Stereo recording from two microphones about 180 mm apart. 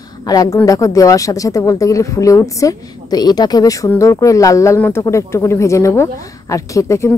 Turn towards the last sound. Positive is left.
turn(degrees=15)  # may be behind; listen again after turning